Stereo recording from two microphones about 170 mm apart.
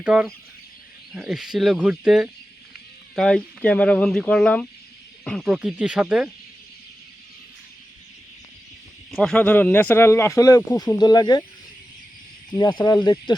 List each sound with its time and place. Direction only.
0.0 s speech: 5° right (ahead or behind)
9.1 s speech: 5° left (ahead or behind); by 11.4 s 25° left (ahead or behind)
12.7 s speech: 20° left (ahead or behind)